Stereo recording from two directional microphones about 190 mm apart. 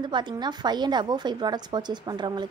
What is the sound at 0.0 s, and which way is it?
A woman's voice, 25° right (ahead or behind).